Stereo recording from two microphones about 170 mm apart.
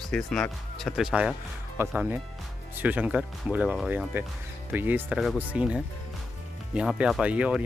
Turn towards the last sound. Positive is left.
turn(degrees=-10)  # may be behind; listen again after turning